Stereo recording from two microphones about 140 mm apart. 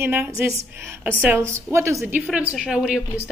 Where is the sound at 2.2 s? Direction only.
5° right (ahead or behind).